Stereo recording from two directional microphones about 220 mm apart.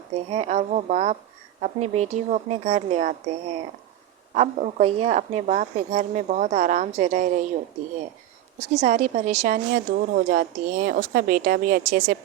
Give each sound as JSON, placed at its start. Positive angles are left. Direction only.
{"t": 0.3, "sound": "a woman's voice", "side_deg": -30}
{"t": 8.7, "sound": "a woman's voice", "side_deg": -35}